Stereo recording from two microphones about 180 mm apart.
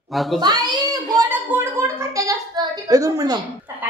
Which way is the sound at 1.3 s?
10° right (ahead or behind).